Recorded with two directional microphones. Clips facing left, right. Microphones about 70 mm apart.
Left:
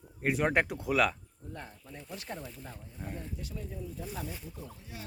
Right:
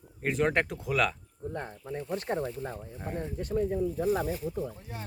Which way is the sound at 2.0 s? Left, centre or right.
Right.